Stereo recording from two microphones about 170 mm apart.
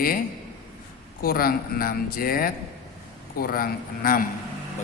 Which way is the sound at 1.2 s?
60° left (ahead or behind).